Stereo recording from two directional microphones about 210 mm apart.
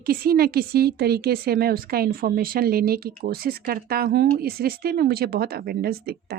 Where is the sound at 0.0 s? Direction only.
45° right (ahead or behind).